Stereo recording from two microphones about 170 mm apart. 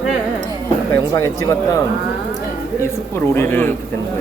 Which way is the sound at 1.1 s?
20° left (ahead or behind).